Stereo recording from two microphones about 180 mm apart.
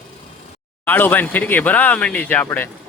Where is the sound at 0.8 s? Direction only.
10° left (ahead or behind).